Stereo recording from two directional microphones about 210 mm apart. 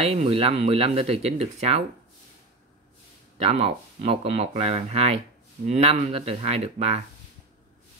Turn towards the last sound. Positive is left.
turn(degrees=-30)  # may be behind; listen again after turning